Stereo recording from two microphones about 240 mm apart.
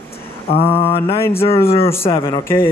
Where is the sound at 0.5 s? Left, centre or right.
Left.